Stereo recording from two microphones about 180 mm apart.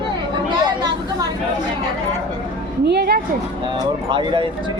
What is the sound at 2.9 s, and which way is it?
Speech, 60° right (ahead or behind).